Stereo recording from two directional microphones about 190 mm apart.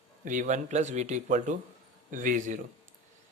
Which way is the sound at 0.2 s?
45° right (ahead or behind).